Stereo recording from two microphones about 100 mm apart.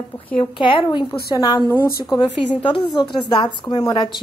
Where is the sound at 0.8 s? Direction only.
35° left (ahead or behind).